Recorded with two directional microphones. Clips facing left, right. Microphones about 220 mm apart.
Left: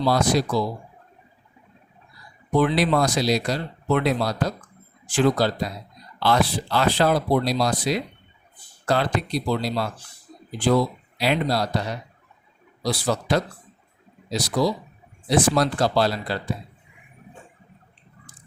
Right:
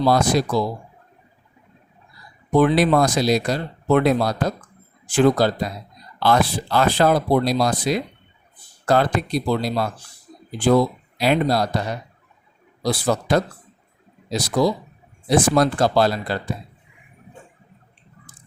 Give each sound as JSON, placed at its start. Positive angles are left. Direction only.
{"t": 0.0, "sound": "speech", "side_deg": -50}
{"t": 2.6, "sound": "speech", "side_deg": -50}
{"t": 12.8, "sound": "speech", "side_deg": -50}